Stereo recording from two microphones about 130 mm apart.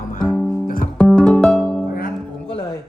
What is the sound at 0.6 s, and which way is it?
Guitar, 90° left.